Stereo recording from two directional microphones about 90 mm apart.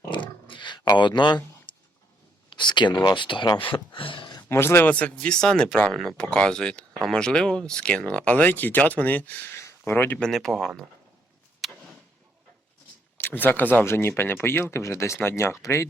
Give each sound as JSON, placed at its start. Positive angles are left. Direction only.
{"t": 0.1, "sound": "a sound", "side_deg": 65}
{"t": 3.0, "sound": "speech", "side_deg": 60}
{"t": 3.6, "sound": "speech", "side_deg": 75}
{"t": 4.4, "sound": "speech", "side_deg": 30}
{"t": 10.2, "sound": "speech", "side_deg": 5}
{"t": 11.6, "sound": "vehicle", "side_deg": 0}
{"t": 13.1, "sound": "speech", "side_deg": 20}